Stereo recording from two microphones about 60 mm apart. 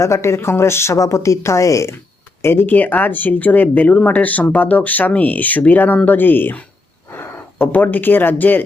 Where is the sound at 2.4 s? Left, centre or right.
Left.